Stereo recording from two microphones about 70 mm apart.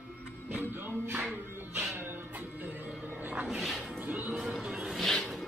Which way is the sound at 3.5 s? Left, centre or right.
Centre.